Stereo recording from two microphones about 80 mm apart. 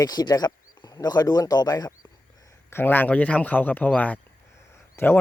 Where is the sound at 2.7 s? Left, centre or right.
Left.